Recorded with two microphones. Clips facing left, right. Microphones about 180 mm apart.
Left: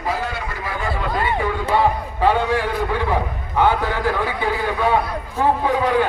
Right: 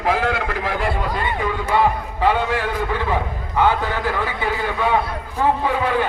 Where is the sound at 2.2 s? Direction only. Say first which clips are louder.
Left 1 dB; 15° left (ahead or behind).